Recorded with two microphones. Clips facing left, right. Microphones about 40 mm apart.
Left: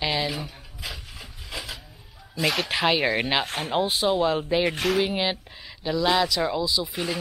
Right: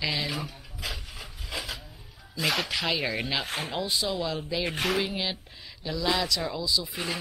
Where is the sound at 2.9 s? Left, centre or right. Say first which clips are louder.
Left 6 dB; centre.